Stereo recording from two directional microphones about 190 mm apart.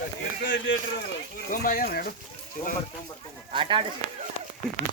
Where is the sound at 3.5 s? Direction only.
25° right (ahead or behind).